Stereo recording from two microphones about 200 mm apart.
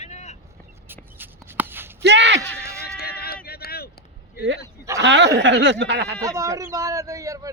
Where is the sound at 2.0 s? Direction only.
60° right (ahead or behind).